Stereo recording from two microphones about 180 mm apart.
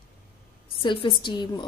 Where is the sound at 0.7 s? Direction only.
25° left (ahead or behind).